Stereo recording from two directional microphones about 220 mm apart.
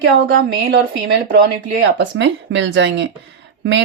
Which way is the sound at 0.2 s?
40° right (ahead or behind).